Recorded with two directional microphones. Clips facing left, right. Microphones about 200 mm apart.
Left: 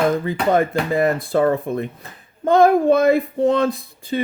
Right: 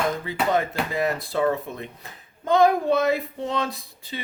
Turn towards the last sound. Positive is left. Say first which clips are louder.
# left 12 dB
turn(degrees=50)  # may be behind; listen again after turning